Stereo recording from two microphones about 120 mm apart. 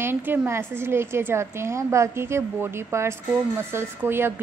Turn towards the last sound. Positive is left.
turn(degrees=-20)  # may be behind; listen again after turning